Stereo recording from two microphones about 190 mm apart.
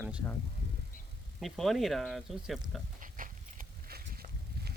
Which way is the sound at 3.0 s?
45° right (ahead or behind).